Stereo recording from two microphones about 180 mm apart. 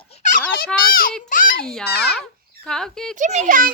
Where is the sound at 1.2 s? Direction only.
50° left (ahead or behind).